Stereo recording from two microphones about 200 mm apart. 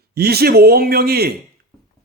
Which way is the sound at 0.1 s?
50° right (ahead or behind).